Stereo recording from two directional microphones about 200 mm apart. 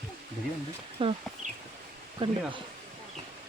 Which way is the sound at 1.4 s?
40° right (ahead or behind).